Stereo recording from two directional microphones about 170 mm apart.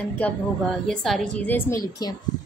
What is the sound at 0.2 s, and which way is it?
A woman's voice, 5° left (ahead or behind).